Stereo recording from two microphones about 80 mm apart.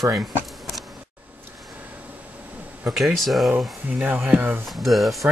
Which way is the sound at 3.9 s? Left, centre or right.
Centre.